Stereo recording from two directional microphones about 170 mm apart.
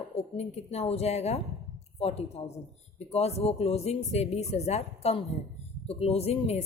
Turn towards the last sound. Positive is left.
turn(degrees=35)  # may be behind; listen again after turning